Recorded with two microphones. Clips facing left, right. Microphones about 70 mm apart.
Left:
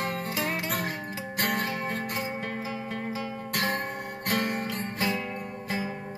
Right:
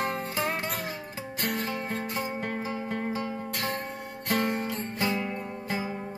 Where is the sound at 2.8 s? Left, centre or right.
Centre.